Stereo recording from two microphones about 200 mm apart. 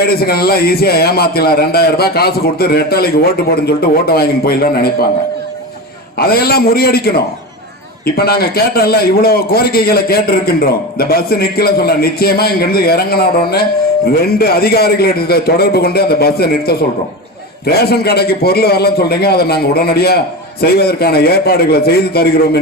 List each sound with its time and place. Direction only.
0.0 s a man's voice: 50° left (ahead or behind)
6.1 s a man's voice: 50° left (ahead or behind)